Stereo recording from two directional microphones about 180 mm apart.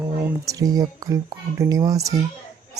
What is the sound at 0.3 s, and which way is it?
Speech, 20° right (ahead or behind).